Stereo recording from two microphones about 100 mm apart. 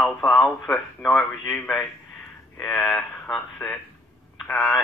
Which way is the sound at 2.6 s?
5° left (ahead or behind).